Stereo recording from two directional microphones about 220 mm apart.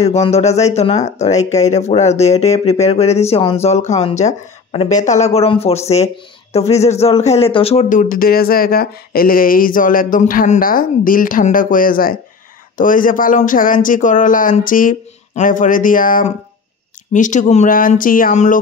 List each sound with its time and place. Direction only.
0.0 s speech: 30° left (ahead or behind)